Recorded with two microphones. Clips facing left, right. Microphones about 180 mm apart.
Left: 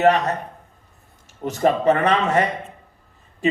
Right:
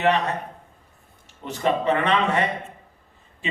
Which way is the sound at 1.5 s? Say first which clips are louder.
Left 5 dB; 40° left (ahead or behind).